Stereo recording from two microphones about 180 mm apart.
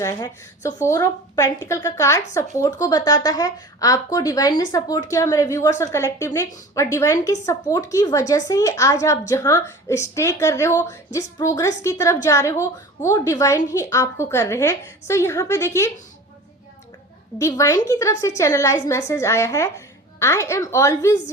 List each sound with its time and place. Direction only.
0.0 s a woman's voice: 20° left (ahead or behind)
17.3 s a woman's voice: 20° left (ahead or behind)